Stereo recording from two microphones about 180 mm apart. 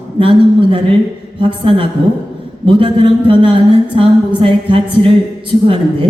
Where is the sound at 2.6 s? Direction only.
30° right (ahead or behind).